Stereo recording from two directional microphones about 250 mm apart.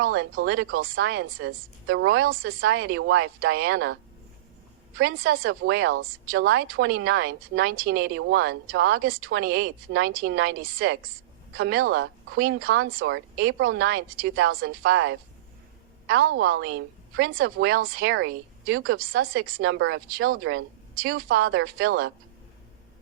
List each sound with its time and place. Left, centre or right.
0.0 s a woman's voice: right
5.3 s a woman's voice: right
9.1 s a woman's voice: right